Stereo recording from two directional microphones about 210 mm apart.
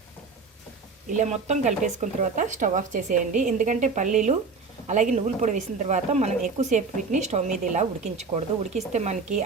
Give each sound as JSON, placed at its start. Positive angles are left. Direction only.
{"t": 1.1, "sound": "a woman's voice", "side_deg": -35}